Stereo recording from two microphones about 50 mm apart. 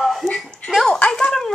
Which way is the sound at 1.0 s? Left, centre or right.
Centre.